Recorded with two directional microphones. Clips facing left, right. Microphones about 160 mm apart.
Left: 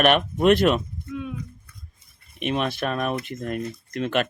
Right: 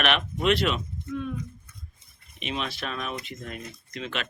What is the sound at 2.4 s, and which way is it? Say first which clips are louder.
Speech: left 7 dB; 55° left (ahead or behind).